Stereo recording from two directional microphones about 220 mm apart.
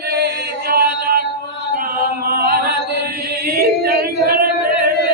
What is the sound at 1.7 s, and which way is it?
Music, 40° right (ahead or behind).